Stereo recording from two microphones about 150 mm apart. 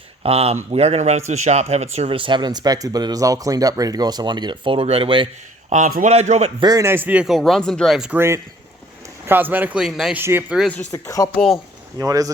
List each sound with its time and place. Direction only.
0.2 s speech: 40° right (ahead or behind)
5.7 s a man's voice: 55° right (ahead or behind)
6.6 s speech: 25° right (ahead or behind); by 8.2 s 5° right (ahead or behind)
9.2 s a man's voice: 15° right (ahead or behind)
10.9 s speech: 20° left (ahead or behind)
11.3 s speech: centre (ahead or behind)
11.9 s speech: 20° right (ahead or behind)